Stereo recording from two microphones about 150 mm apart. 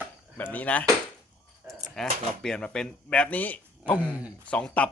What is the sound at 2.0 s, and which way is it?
Speech, 5° left (ahead or behind).